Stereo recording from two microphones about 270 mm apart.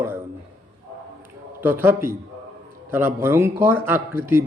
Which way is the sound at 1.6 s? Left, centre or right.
Centre.